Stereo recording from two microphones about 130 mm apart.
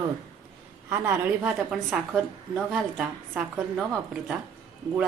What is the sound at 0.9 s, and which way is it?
A woman's voice, 15° right (ahead or behind).